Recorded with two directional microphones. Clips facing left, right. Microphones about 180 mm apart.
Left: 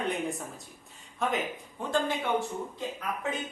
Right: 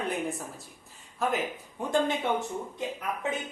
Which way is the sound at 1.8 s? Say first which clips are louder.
Right 3 dB; 15° right (ahead or behind).